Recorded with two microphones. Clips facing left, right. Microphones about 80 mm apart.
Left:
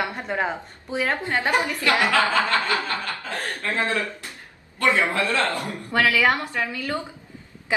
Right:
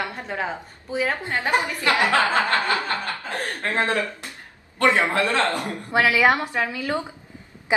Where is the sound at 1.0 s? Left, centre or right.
Centre.